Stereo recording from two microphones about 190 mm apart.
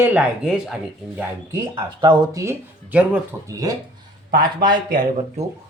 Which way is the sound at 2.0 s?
20° right (ahead or behind).